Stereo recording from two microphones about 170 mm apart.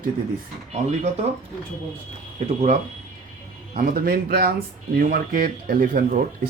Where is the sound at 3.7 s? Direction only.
55° right (ahead or behind).